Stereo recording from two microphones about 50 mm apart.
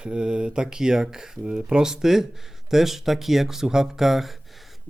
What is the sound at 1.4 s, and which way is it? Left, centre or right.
Speech, right.